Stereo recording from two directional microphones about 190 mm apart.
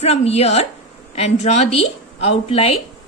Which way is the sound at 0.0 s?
35° left (ahead or behind).